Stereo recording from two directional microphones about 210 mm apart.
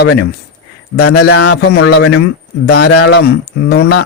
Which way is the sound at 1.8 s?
80° left.